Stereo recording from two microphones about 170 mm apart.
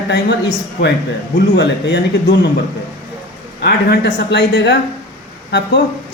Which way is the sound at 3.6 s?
85° left.